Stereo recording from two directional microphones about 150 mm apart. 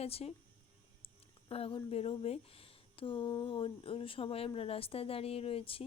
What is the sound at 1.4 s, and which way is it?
Speech, 40° left (ahead or behind).